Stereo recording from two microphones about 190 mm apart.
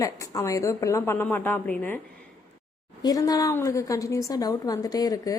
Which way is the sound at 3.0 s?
20° left (ahead or behind).